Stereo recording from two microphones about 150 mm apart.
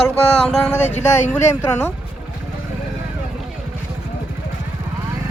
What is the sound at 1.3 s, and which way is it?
Speech, 15° left (ahead or behind).